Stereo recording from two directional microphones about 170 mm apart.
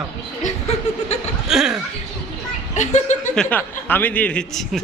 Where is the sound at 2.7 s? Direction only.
45° left (ahead or behind).